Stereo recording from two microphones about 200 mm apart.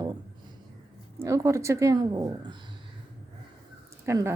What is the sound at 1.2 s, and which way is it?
A woman's voice, 15° right (ahead or behind).